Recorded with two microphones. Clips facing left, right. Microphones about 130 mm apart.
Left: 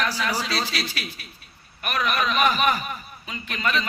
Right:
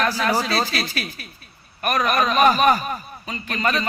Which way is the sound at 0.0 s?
45° right (ahead or behind).